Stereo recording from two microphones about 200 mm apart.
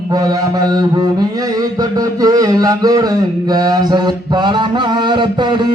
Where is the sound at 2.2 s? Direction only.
20° right (ahead or behind).